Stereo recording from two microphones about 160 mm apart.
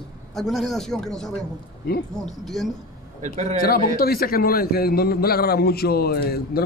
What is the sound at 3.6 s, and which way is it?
A man's voice, 65° left (ahead or behind).